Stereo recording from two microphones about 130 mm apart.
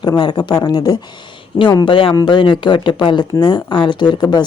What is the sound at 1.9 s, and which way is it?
A woman's voice, 45° left (ahead or behind).